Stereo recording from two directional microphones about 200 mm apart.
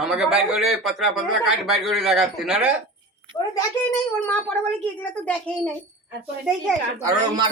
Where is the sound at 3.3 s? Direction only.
20° left (ahead or behind).